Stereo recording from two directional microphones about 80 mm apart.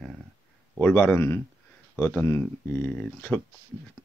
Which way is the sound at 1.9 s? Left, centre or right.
Left.